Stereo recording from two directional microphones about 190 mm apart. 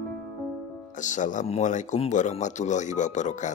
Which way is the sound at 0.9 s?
40° left (ahead or behind).